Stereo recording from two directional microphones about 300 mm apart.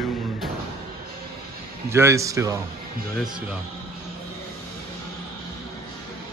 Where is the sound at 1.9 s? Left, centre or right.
Centre.